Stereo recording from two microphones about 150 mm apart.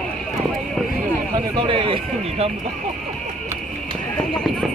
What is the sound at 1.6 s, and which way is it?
Horse, 35° right (ahead or behind).